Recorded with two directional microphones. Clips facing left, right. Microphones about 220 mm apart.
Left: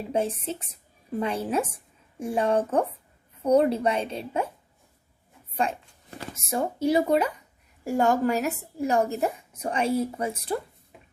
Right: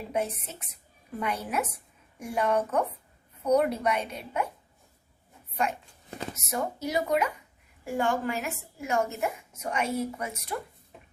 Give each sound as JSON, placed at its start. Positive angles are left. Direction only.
{"t": 0.1, "sound": "a woman's voice", "side_deg": 30}
{"t": 5.6, "sound": "a woman's voice", "side_deg": 30}